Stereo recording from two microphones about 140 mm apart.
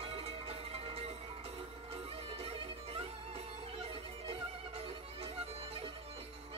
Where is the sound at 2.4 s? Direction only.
45° right (ahead or behind).